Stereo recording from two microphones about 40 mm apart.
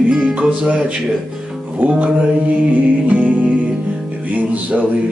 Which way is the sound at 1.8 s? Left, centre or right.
Right.